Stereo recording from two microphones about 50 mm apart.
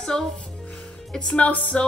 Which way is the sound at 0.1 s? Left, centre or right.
Centre.